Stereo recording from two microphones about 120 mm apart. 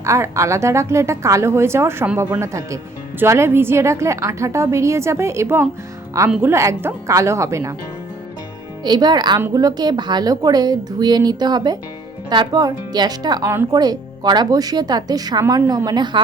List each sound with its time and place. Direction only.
0.0 s a woman's voice: 25° right (ahead or behind)
8.8 s speech: 35° right (ahead or behind)
13.5 s a woman's voice: 20° right (ahead or behind)
13.7 s speech: 35° right (ahead or behind)